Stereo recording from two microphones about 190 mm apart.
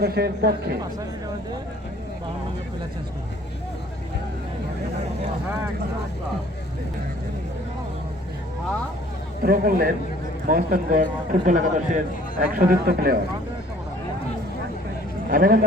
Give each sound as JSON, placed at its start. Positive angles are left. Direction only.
{"t": 0.0, "sound": "speech", "side_deg": -55}
{"t": 9.4, "sound": "speech", "side_deg": -50}
{"t": 15.3, "sound": "speech", "side_deg": -50}